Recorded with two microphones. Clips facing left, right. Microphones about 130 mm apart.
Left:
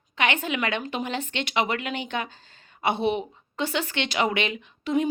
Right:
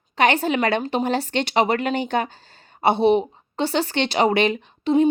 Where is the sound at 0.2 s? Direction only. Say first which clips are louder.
Right 7 dB; 35° right (ahead or behind).